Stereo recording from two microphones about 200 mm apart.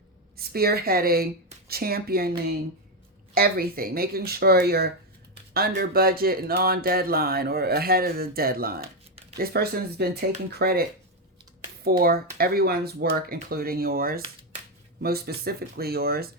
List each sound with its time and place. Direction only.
0.3 s speech: 50° right (ahead or behind)